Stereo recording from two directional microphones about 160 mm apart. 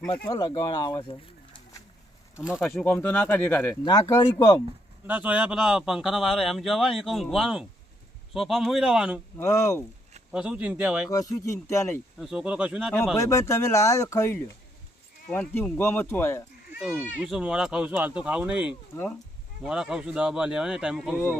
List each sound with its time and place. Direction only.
0.3 s speech: 30° left (ahead or behind)
2.7 s speech: 10° left (ahead or behind)
4.1 s speech: 25° left (ahead or behind)
5.0 s speech: 10° right (ahead or behind)
9.4 s speech: 15° left (ahead or behind)
10.3 s speech: 5° right (ahead or behind)
11.1 s speech: 20° left (ahead or behind)
12.2 s speech: 5° right (ahead or behind)
13.1 s speech: 20° left (ahead or behind)
16.7 s speech: 5° right (ahead or behind)